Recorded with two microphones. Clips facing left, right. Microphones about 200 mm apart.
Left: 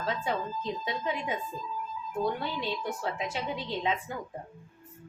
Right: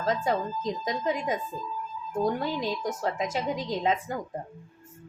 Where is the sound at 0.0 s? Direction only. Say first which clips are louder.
Right 5 dB; 40° right (ahead or behind).